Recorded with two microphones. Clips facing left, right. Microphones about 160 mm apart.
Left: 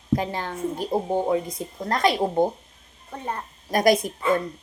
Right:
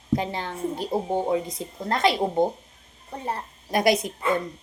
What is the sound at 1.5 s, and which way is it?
Speech, 25° right (ahead or behind).